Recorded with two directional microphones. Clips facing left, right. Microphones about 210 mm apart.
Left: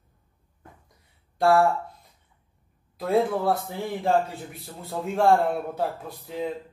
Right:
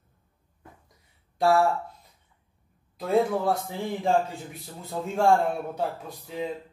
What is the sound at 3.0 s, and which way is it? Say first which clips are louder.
Speech: left 1 dB; centre (ahead or behind).